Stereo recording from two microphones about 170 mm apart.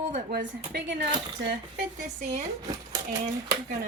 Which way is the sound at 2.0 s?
45° right (ahead or behind).